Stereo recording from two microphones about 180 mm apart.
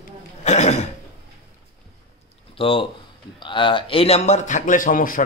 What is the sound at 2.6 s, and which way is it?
Speech, 30° left (ahead or behind).